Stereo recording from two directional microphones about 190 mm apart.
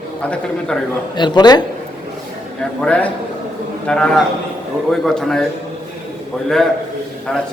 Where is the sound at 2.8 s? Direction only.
5° left (ahead or behind).